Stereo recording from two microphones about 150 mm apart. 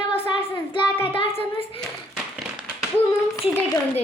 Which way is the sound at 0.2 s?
35° left (ahead or behind).